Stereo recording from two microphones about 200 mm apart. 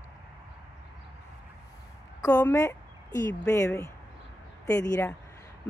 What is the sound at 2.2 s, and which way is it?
Speech, 20° left (ahead or behind).